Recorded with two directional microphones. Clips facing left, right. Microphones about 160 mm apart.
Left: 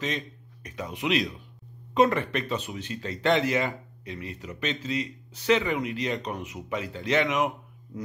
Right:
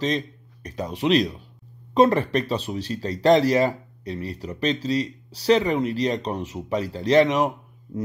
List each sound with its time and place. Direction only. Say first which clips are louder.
0.0 s a man's voice: right 7 dB; 35° right (ahead or behind)